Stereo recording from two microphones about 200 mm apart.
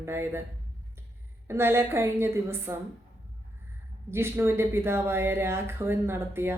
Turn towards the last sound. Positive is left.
turn(degrees=-10)  # may be behind; listen again after turning